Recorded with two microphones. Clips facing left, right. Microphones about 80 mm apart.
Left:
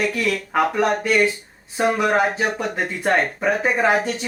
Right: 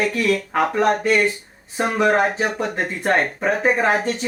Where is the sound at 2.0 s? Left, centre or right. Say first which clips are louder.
Right 6 dB; centre.